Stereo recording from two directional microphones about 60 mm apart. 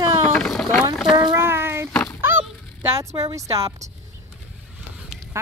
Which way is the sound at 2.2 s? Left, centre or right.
Right.